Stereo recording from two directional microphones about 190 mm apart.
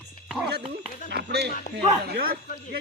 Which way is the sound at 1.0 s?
60° right (ahead or behind).